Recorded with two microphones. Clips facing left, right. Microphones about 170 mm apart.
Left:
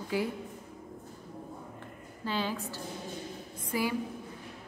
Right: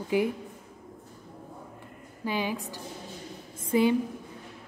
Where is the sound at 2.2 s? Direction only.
15° right (ahead or behind).